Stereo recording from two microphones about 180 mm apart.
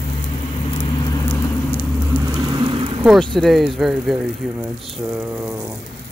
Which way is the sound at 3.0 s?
Centre (ahead or behind).